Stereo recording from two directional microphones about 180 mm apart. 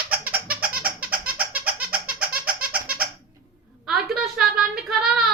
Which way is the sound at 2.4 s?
55° right (ahead or behind).